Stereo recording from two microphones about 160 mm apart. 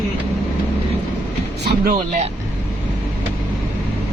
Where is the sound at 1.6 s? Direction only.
90° right.